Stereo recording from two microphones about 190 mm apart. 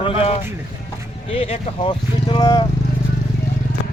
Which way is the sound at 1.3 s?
30° left (ahead or behind).